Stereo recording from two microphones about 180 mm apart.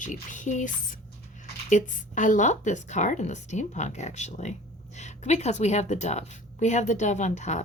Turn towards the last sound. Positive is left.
turn(degrees=40)  # may be behind; listen again after turning